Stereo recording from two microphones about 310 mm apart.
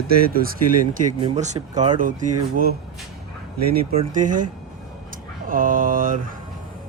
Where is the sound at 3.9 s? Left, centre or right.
Right.